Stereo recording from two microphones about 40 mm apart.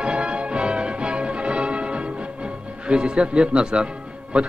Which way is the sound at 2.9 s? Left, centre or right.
Right.